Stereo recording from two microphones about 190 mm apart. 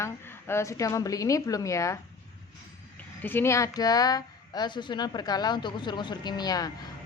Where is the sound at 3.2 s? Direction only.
10° left (ahead or behind).